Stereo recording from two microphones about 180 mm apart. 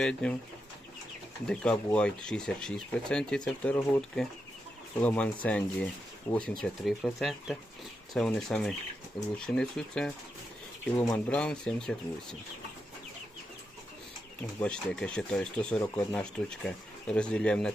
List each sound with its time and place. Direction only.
0.0 s speech: 5° left (ahead or behind)
1.5 s speech: 5° left (ahead or behind)
10.9 s speech: 20° left (ahead or behind)
11.3 s speech: 5° left (ahead or behind)
14.6 s speech: 5° left (ahead or behind)